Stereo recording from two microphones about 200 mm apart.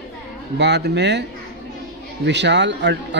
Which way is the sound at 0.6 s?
60° right (ahead or behind).